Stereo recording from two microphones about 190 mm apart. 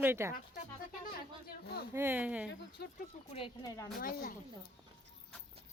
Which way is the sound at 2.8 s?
55° left (ahead or behind).